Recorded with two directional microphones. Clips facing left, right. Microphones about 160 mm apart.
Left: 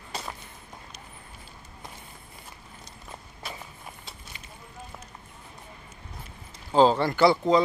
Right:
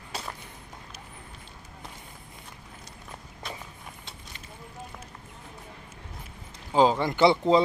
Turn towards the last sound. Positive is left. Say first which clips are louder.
# even
turn(degrees=-25)  # may be behind; listen again after turning